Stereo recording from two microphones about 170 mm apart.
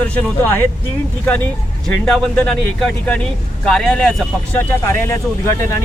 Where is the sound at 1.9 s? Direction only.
5° left (ahead or behind).